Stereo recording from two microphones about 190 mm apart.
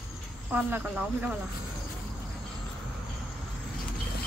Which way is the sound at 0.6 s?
10° right (ahead or behind).